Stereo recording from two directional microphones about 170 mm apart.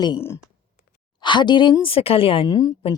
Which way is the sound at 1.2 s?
25° left (ahead or behind).